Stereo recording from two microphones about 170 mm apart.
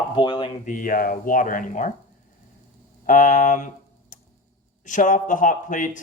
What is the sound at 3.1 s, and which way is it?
Speech, 50° left (ahead or behind).